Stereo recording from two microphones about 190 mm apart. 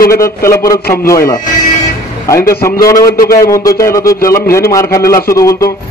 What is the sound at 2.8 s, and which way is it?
A man's voice, 15° left (ahead or behind).